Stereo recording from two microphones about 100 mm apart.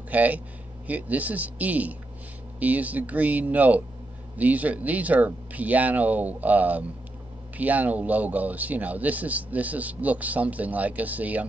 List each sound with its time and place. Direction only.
0.1 s speech: 15° right (ahead or behind)